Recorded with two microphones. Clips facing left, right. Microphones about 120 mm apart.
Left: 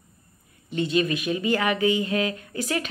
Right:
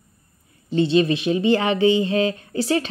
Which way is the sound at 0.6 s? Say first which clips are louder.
Right 6 dB; 30° right (ahead or behind).